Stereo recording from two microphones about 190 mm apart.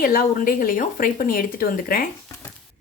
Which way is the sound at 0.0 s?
50° left (ahead or behind).